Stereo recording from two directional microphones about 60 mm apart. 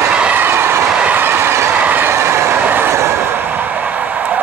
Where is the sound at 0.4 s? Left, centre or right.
Right.